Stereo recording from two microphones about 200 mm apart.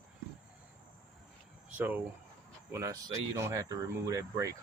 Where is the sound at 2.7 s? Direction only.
15° right (ahead or behind).